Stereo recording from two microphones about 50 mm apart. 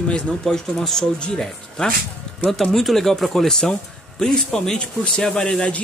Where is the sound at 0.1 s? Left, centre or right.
Centre.